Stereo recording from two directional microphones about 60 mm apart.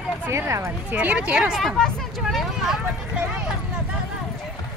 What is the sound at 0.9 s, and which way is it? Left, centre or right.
Speech, right.